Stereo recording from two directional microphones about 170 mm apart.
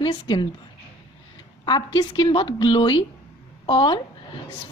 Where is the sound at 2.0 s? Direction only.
25° left (ahead or behind).